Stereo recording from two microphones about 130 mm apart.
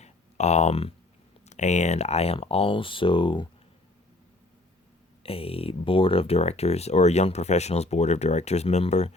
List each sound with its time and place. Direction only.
0.0 s a sound: 60° left (ahead or behind)
1.5 s speech: 65° left (ahead or behind); by 3.5 s 40° left (ahead or behind)
5.2 s speech: 50° left (ahead or behind)